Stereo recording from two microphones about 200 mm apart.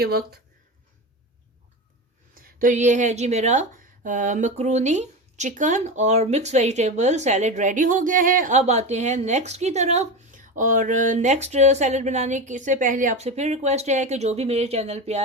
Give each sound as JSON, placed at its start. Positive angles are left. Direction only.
{"t": 0.0, "sound": "speech", "side_deg": -50}
{"t": 2.3, "sound": "a woman's voice", "side_deg": -45}